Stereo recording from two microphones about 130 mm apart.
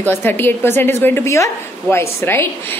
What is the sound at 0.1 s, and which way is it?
A woman's voice, 15° left (ahead or behind).